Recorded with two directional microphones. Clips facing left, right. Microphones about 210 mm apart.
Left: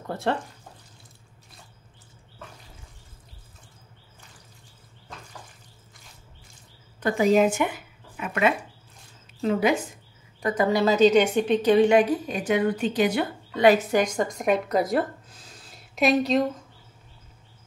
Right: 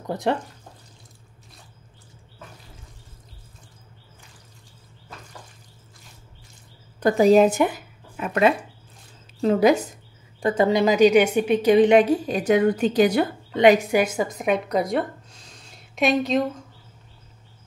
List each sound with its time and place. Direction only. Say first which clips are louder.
0.0 s speech: right 3 dB; 15° right (ahead or behind)
7.0 s speech: right 5 dB; 35° right (ahead or behind)
10.4 s a woman's voice: right 3 dB; 25° right (ahead or behind)
13.5 s speech: right 2 dB; 20° right (ahead or behind); by 16.4 s centre (ahead or behind)